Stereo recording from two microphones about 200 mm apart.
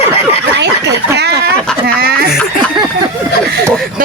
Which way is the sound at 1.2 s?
55° right (ahead or behind).